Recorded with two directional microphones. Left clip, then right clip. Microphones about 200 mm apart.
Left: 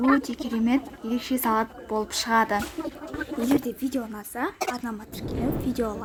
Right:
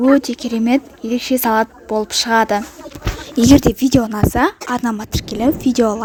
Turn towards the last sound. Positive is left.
turn(degrees=-40)  # may be behind; listen again after turning